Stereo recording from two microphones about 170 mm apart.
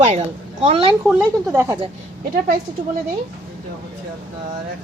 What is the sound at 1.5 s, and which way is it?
Speech, 15° right (ahead or behind).